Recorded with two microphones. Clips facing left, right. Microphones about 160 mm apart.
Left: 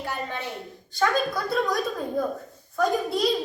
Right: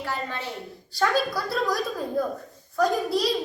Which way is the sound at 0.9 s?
Centre (ahead or behind).